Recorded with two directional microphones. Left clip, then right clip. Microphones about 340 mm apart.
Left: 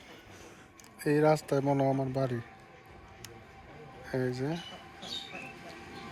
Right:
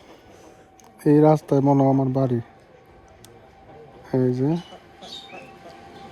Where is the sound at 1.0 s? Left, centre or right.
Right.